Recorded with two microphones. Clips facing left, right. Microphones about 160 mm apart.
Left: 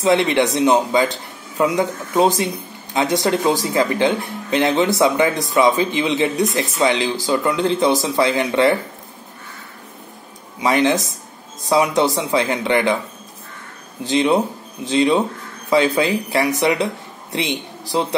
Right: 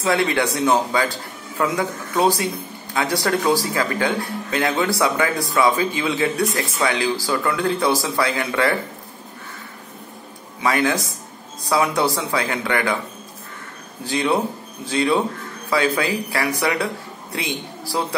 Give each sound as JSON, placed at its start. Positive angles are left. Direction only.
{"t": 0.0, "sound": "speech", "side_deg": 20}
{"t": 10.6, "sound": "speech", "side_deg": 20}
{"t": 14.0, "sound": "speech", "side_deg": 20}